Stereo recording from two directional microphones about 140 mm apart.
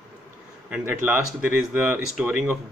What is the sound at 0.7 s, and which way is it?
Speech, 10° right (ahead or behind).